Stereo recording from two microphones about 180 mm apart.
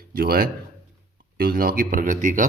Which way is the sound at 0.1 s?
55° right (ahead or behind).